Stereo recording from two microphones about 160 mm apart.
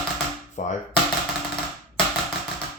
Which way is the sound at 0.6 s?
50° left (ahead or behind).